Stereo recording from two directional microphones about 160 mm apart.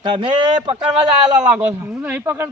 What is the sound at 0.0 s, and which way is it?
Speech, 30° right (ahead or behind).